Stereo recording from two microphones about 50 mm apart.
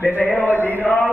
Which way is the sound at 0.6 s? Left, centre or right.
Left.